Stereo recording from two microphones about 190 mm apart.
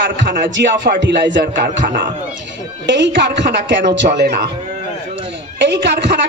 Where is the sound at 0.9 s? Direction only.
70° right (ahead or behind).